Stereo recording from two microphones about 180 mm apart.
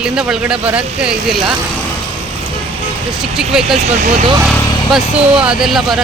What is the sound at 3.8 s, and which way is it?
Speech, 35° right (ahead or behind).